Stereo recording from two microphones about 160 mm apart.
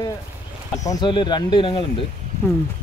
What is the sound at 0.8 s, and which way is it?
Speech, 30° left (ahead or behind).